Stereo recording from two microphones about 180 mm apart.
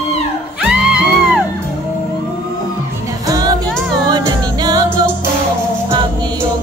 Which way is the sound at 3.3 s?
20° right (ahead or behind).